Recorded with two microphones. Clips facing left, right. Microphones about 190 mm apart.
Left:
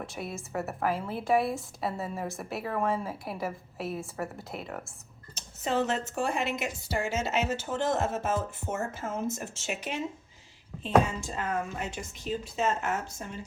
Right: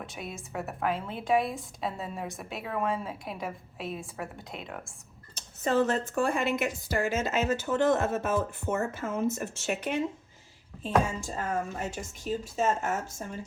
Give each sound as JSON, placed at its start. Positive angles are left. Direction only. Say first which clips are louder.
{"t": 0.0, "sound": "a woman's voice", "louder": "left 2 dB", "side_deg": 0}
{"t": 5.3, "sound": "a woman's voice", "louder": "right 3 dB", "side_deg": -50}